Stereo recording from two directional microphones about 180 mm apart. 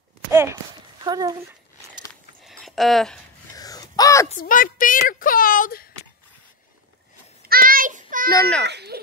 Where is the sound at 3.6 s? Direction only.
20° left (ahead or behind).